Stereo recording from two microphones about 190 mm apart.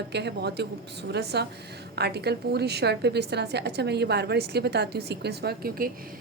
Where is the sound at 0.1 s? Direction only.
60° right (ahead or behind).